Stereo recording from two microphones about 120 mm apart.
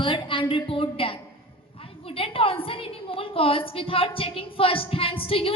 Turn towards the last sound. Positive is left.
turn(degrees=50)  # may be behind; listen again after turning